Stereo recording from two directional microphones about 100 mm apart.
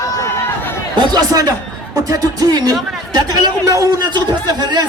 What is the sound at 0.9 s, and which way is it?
A woman's voice, 40° right (ahead or behind).